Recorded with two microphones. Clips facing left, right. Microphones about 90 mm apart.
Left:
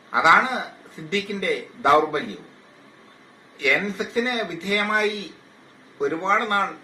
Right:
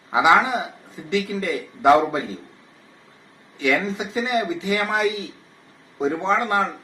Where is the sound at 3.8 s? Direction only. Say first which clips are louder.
Left 1 dB; 15° right (ahead or behind).